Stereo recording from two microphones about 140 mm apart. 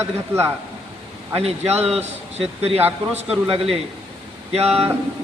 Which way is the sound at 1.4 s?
50° right (ahead or behind).